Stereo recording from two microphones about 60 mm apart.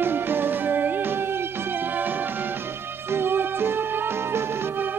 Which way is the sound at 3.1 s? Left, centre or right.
Right.